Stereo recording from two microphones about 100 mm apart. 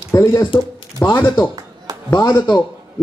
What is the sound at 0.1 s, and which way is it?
Speech, 35° left (ahead or behind).